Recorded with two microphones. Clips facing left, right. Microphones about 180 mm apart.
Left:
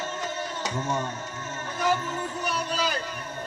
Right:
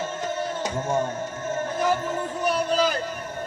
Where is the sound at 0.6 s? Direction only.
50° right (ahead or behind).